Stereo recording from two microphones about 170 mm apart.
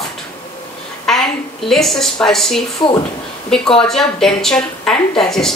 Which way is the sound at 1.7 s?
Centre (ahead or behind).